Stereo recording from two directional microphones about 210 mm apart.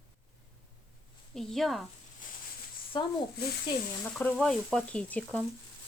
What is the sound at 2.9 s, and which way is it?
Speech, 20° left (ahead or behind).